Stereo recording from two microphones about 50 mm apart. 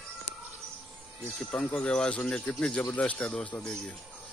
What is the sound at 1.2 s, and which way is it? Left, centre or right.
Speech, left.